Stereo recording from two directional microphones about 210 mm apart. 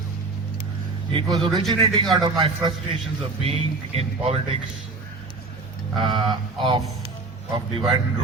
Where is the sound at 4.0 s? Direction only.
30° right (ahead or behind).